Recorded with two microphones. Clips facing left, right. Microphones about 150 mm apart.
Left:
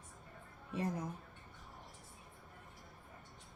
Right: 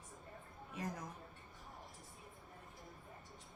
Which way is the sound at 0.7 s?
30° left (ahead or behind).